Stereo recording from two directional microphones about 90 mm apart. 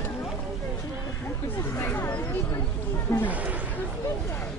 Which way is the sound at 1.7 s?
25° left (ahead or behind).